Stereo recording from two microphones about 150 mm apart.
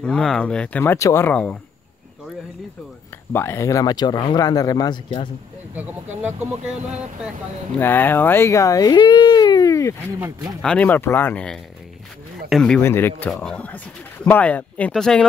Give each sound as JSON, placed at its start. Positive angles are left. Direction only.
{"t": 0.0, "sound": "speech", "side_deg": 5}
{"t": 1.3, "sound": "speech", "side_deg": 5}
{"t": 3.3, "sound": "speech", "side_deg": 15}
{"t": 5.8, "sound": "speech", "side_deg": -10}
{"t": 7.8, "sound": "speech", "side_deg": 15}
{"t": 10.6, "sound": "speech", "side_deg": 10}
{"t": 12.8, "sound": "speech", "side_deg": 15}
{"t": 13.3, "sound": "speech", "side_deg": 5}